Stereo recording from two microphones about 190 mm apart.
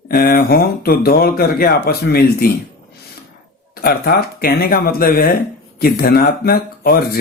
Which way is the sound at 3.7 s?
55° left (ahead or behind).